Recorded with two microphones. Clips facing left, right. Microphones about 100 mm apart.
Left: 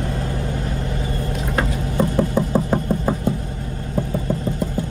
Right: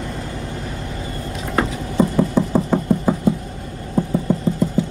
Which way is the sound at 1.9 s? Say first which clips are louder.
Right 3 dB; centre (ahead or behind).